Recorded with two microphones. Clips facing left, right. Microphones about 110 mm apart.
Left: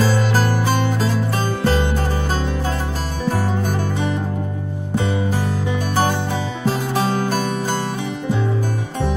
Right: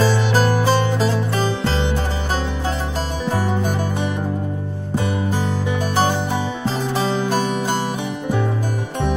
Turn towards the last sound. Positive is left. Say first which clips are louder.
# right 1 dB
turn(degrees=-15)  # may be behind; listen again after turning